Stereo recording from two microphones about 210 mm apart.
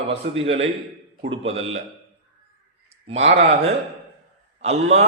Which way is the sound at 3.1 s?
30° right (ahead or behind).